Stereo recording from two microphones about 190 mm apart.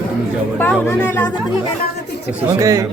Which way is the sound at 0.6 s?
10° left (ahead or behind).